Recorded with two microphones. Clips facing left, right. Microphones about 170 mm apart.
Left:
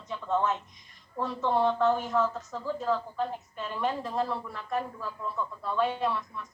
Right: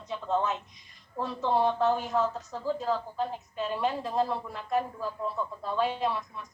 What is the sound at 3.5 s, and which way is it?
A woman's voice, 15° right (ahead or behind).